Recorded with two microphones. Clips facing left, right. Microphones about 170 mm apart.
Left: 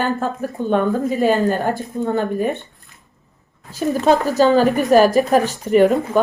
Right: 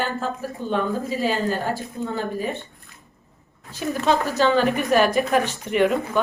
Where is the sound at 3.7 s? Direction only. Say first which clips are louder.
Left 6 dB; 40° left (ahead or behind).